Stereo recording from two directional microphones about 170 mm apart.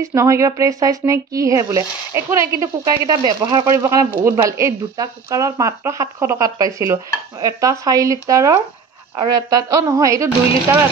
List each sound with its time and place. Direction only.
0.0 s speech: 15° right (ahead or behind)